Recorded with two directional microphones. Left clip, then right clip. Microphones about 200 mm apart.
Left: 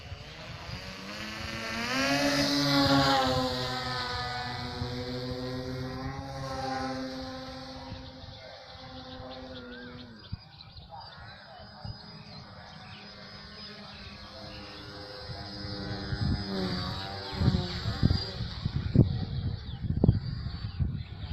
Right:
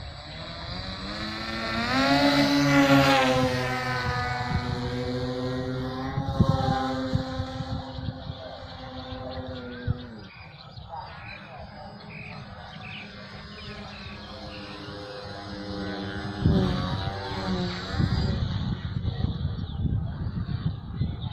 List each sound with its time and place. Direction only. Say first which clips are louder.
0.7 s vehicle: right 6 dB; 20° left (ahead or behind)
2.6 s vehicle: right 4 dB; 5° right (ahead or behind)
15.6 s vehicle: right 6 dB; 10° left (ahead or behind)